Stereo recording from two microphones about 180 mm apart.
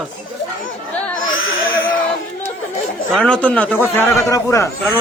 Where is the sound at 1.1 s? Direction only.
90° left.